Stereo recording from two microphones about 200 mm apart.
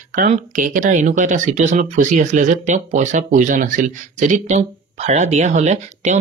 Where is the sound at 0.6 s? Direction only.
40° right (ahead or behind).